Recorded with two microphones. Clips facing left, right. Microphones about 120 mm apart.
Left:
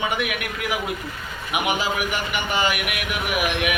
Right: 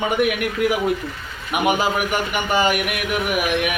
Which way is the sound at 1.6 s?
45° right (ahead or behind).